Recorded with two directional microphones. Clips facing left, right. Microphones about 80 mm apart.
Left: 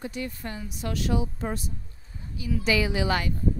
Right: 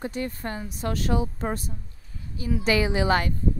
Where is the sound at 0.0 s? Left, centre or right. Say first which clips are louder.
Right 3 dB; right.